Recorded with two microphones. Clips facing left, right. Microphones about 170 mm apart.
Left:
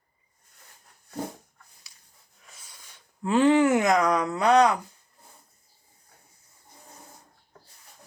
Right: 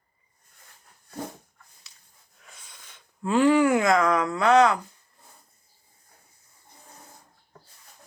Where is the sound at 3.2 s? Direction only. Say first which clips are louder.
Even; 20° left (ahead or behind).